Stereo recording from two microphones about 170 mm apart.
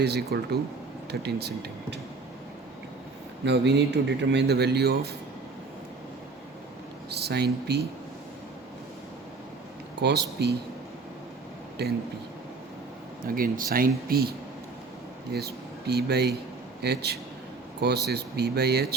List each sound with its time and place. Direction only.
0.0 s a man's voice: 70° right (ahead or behind)
3.4 s a man's voice: 90° right; by 5.1 s 70° right (ahead or behind)
7.1 s a man's voice: 75° right (ahead or behind)
10.0 s speech: 80° right
11.8 s a man's voice: 75° right (ahead or behind)
13.2 s a man's voice: 55° right (ahead or behind)